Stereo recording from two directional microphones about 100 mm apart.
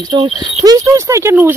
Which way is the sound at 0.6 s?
35° right (ahead or behind).